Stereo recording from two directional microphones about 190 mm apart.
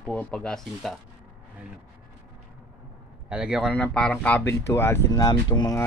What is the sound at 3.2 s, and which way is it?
Speech, 5° right (ahead or behind).